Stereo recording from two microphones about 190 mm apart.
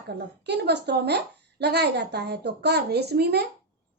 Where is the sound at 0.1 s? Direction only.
60° right (ahead or behind).